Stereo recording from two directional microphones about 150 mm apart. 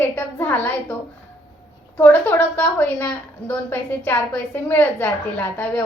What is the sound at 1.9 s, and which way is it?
A woman's voice, 15° left (ahead or behind).